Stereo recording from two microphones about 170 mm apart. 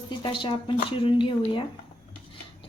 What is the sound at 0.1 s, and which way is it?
A woman's voice, 30° left (ahead or behind).